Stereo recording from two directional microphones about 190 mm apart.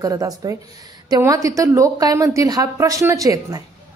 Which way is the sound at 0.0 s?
20° right (ahead or behind).